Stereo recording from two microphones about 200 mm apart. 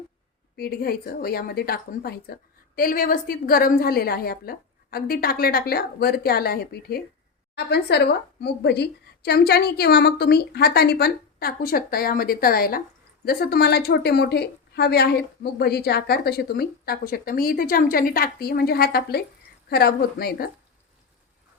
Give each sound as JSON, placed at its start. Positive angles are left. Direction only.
{"t": 0.5, "sound": "speech", "side_deg": 50}